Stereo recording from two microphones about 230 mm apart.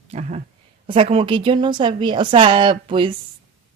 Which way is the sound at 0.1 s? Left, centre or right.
Right.